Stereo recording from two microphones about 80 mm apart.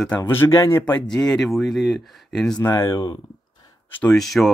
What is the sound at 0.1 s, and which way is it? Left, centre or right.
Speech, left.